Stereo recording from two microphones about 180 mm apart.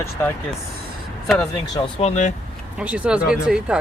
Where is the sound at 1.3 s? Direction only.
Centre (ahead or behind).